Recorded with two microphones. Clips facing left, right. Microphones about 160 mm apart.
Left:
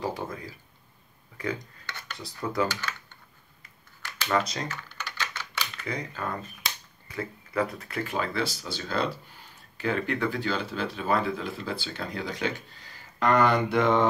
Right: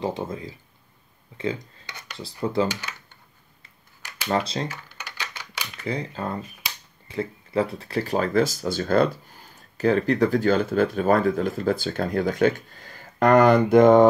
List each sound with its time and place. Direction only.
0.0 s speech: 25° right (ahead or behind)
4.3 s speech: 30° right (ahead or behind)
4.6 s typing: 10° right (ahead or behind)
5.9 s speech: 30° right (ahead or behind)